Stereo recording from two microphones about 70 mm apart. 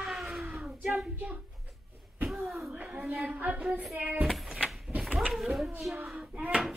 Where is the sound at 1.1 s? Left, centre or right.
Right.